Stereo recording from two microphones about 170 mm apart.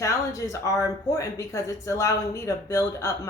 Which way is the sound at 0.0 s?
20° left (ahead or behind).